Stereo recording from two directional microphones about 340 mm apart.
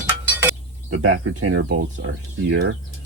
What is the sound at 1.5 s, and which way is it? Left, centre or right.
Speech, right.